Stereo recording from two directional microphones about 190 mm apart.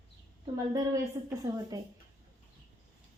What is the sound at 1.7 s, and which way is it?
Speech, 20° right (ahead or behind).